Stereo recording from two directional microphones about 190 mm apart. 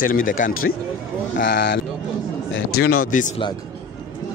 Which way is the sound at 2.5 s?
55° left (ahead or behind).